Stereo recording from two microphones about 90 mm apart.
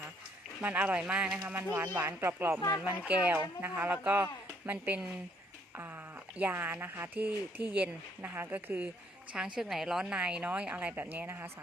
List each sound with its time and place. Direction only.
0.6 s a woman's voice: 15° right (ahead or behind)
2.8 s a woman's voice: 15° right (ahead or behind)
6.3 s speech: 20° right (ahead or behind)
9.6 s a woman's voice: 5° right (ahead or behind); by 11.5 s 30° right (ahead or behind)